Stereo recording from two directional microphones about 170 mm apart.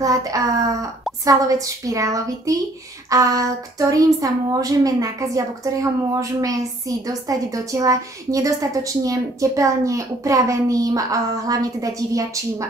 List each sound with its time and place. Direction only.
0.0 s speech: 20° right (ahead or behind)